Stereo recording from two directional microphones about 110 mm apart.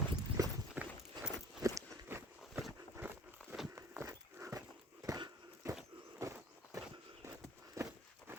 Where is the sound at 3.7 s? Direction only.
20° right (ahead or behind).